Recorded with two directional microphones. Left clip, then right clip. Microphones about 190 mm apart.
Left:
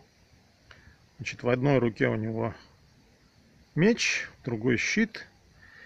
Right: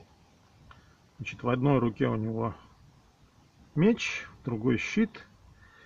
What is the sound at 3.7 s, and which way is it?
Speech, 10° left (ahead or behind).